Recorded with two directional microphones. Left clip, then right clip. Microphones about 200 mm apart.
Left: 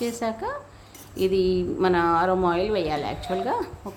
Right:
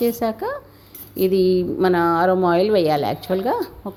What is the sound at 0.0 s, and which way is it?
A woman's voice, 25° right (ahead or behind).